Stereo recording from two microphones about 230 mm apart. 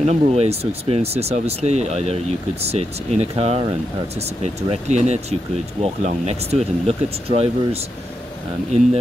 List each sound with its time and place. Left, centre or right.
0.0 s speech: right